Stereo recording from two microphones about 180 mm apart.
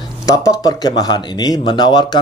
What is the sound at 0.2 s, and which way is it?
Speech, 20° left (ahead or behind).